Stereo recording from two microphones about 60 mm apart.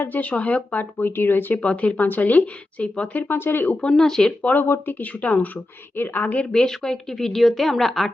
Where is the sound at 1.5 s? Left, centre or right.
Left.